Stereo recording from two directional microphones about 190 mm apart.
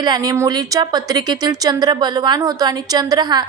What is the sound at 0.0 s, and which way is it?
Speech, 20° right (ahead or behind).